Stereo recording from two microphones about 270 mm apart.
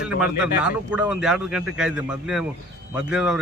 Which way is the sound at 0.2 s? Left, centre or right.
Centre.